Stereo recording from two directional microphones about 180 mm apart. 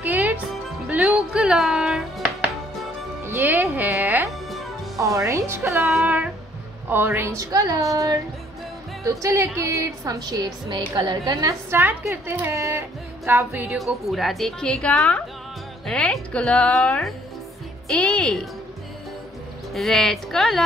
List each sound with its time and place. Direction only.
0.0 s music: 10° right (ahead or behind)
3.3 s a woman's voice: 10° right (ahead or behind)
14.0 s a woman's voice: centre (ahead or behind)
19.7 s a woman's voice: centre (ahead or behind)